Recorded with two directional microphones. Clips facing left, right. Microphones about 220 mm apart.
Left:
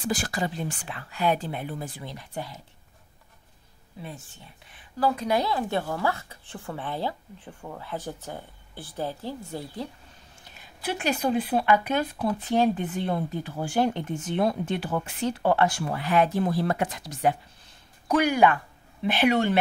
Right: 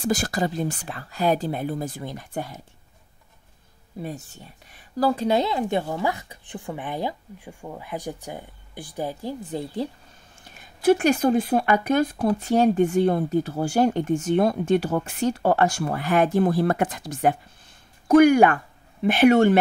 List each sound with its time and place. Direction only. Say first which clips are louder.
0.0 s speech: right 4 dB; 45° right (ahead or behind)
4.0 s speech: right 7 dB; 45° right (ahead or behind); by 9.7 s 20° right (ahead or behind)
10.5 s speech: right 13 dB; 45° right (ahead or behind)